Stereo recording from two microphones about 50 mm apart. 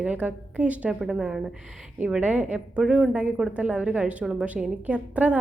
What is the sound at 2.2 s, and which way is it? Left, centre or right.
Speech, right.